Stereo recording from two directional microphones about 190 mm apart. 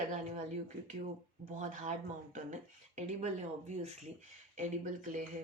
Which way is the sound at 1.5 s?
40° right (ahead or behind).